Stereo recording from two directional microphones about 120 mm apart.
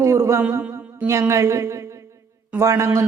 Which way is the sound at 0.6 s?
15° right (ahead or behind).